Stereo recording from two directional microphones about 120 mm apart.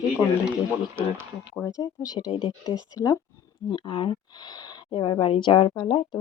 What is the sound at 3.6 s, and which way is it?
Speech, 45° left (ahead or behind).